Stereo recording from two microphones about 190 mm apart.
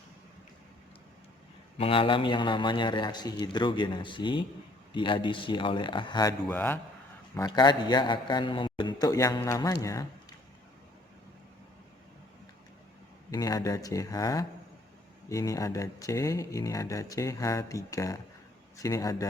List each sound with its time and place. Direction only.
1.8 s a man's voice: 30° left (ahead or behind)
6.5 s speech: 10° left (ahead or behind)
7.3 s a man's voice: 20° left (ahead or behind)
13.3 s a man's voice: 20° left (ahead or behind)